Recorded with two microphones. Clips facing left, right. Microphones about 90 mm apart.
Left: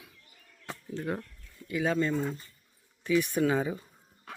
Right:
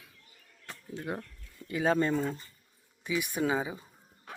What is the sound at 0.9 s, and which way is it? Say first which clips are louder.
Speech: left 3 dB; 10° right (ahead or behind).